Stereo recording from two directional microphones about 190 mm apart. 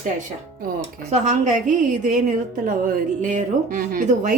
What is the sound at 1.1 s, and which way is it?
A woman's voice, 40° right (ahead or behind).